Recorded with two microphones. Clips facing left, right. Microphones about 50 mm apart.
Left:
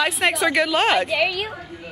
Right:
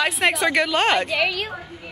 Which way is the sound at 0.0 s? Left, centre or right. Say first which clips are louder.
Even; centre.